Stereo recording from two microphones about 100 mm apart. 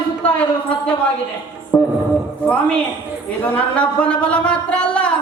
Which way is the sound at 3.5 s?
10° left (ahead or behind).